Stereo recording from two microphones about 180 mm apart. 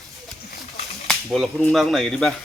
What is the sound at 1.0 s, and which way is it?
Cap gun, centre (ahead or behind).